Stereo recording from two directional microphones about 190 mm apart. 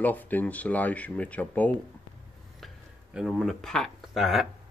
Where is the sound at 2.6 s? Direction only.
Centre (ahead or behind).